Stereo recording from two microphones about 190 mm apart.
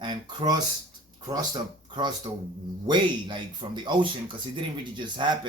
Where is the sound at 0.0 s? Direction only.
20° right (ahead or behind).